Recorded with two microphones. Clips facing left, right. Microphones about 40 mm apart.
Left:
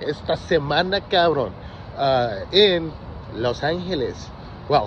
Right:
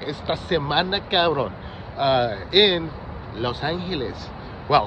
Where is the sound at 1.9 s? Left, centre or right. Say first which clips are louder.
Left 1 dB; right.